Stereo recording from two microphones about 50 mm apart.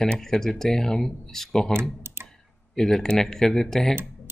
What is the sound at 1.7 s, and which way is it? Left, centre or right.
Computer keyboard, right.